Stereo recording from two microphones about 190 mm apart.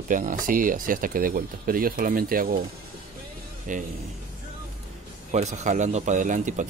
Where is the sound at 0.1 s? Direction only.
45° right (ahead or behind).